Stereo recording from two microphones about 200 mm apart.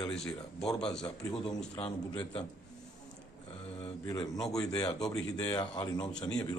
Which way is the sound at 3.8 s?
30° left (ahead or behind).